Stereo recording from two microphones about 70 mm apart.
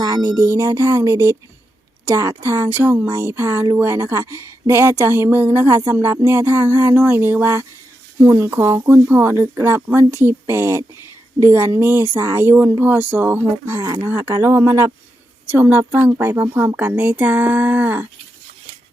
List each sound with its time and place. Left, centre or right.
0.0 s a woman's voice: right
12.8 s a woman's voice: right